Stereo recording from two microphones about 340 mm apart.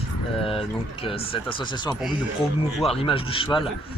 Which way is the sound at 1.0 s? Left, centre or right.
Centre.